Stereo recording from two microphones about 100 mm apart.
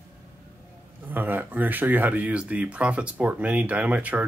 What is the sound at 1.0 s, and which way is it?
Speech, 20° right (ahead or behind).